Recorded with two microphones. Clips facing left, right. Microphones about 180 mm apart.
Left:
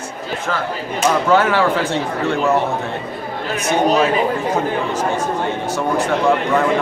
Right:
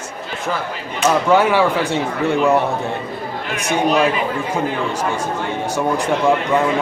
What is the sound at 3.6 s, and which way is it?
Speech, 35° left (ahead or behind).